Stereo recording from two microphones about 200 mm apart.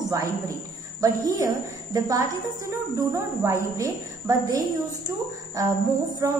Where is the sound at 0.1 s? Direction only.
15° right (ahead or behind).